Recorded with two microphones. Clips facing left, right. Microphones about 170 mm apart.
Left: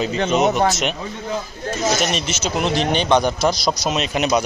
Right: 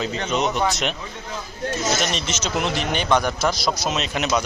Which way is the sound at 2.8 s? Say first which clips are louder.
Left 5 dB; 20° left (ahead or behind).